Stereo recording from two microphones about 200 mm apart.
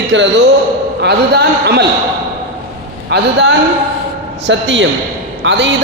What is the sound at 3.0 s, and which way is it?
A man's voice, 60° right (ahead or behind).